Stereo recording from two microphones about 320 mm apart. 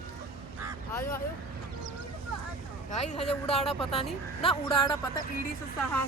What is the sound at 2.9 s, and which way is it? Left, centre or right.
A woman's voice, left.